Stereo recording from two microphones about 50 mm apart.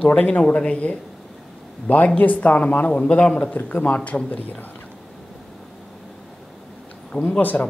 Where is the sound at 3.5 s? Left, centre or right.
Left.